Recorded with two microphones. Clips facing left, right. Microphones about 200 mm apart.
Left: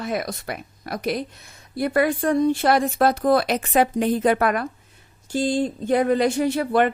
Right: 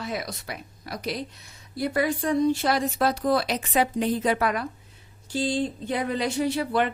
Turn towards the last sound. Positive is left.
turn(degrees=55)  # may be behind; listen again after turning